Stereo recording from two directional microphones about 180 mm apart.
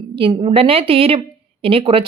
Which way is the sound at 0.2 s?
25° right (ahead or behind).